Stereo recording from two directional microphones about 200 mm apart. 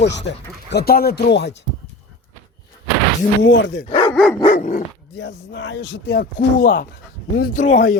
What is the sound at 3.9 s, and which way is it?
Dog, 25° left (ahead or behind).